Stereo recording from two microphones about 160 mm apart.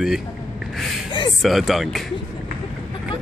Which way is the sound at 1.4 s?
Centre (ahead or behind).